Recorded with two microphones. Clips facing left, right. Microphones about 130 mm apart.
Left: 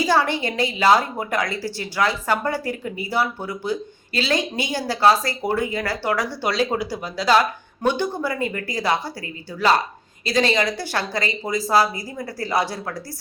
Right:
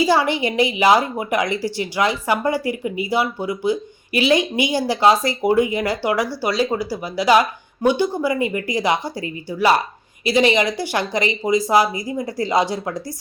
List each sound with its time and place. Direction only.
0.0 s a woman's voice: 10° right (ahead or behind)